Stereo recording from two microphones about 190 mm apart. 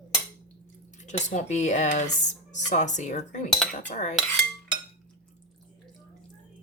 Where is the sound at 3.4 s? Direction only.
Centre (ahead or behind).